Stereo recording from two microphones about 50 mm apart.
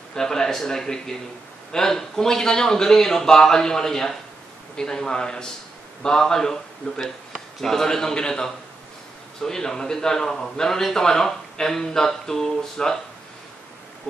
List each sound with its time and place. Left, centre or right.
0.1 s a man's voice: centre